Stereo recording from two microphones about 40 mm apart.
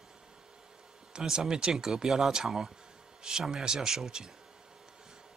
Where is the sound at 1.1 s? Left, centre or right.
Centre.